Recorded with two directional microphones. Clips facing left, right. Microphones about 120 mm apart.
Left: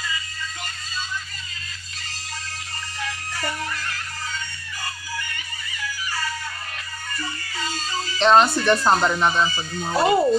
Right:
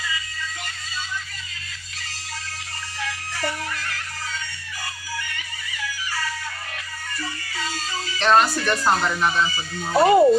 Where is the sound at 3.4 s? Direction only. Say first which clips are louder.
Right 1 dB; 40° left (ahead or behind).